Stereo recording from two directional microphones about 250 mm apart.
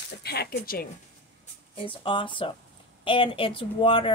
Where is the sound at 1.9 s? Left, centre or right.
Centre.